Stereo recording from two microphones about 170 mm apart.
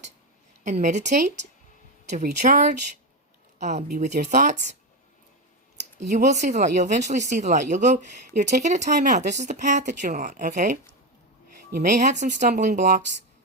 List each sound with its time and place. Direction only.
0.6 s speech: 45° right (ahead or behind)
6.1 s speech: 45° right (ahead or behind)